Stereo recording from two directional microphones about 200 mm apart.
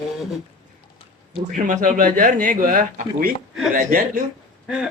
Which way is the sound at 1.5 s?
40° right (ahead or behind).